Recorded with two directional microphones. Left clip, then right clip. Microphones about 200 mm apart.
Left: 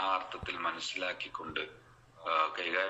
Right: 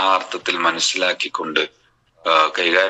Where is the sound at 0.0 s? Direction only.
55° right (ahead or behind).